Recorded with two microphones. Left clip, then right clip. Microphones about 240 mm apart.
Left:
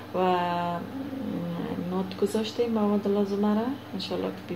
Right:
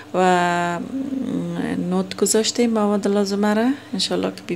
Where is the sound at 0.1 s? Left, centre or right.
Right.